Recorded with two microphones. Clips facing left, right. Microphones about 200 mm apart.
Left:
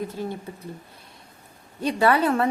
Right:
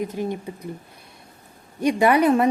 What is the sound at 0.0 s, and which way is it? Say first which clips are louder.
Speech: right 4 dB; 15° right (ahead or behind).